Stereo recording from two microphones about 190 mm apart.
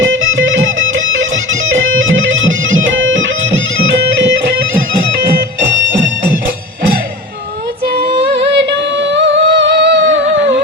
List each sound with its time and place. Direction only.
0.0 s music: 90° right
7.9 s music: 65° right (ahead or behind)